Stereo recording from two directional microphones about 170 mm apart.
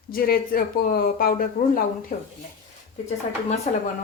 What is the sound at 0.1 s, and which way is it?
A woman's voice, 60° left (ahead or behind).